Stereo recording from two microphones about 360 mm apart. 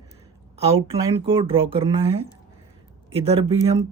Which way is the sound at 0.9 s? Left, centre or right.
Centre.